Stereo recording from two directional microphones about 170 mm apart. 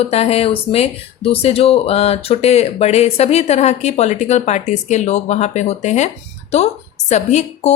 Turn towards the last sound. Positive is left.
turn(degrees=45)  # may be behind; listen again after turning